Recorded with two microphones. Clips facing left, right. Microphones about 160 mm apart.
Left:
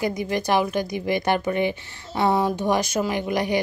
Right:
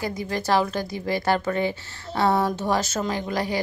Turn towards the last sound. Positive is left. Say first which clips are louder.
# left 3 dB
turn(degrees=20)  # may be behind; listen again after turning